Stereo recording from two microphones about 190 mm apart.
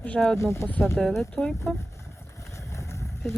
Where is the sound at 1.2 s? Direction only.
5° left (ahead or behind).